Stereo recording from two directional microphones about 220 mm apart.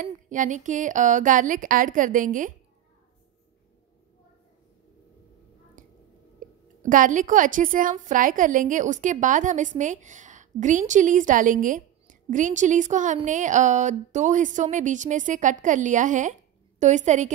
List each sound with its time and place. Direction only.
0.0 s a woman's voice: 35° right (ahead or behind)
5.8 s a sound: 35° right (ahead or behind)
6.8 s a woman's voice: 35° right (ahead or behind)